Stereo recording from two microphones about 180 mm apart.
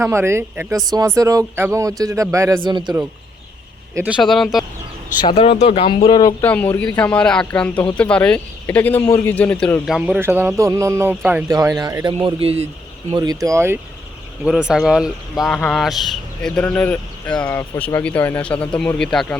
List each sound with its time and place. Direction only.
0.0 s speech: 15° right (ahead or behind)
4.2 s speech: centre (ahead or behind)
5.2 s speech: 30° left (ahead or behind)
6.4 s speech: 10° left (ahead or behind)
9.8 s speech: centre (ahead or behind); by 12.1 s 20° right (ahead or behind)
12.1 s speech: 35° right (ahead or behind)
13.1 s speech: 20° right (ahead or behind)
14.4 s speech: 5° right (ahead or behind)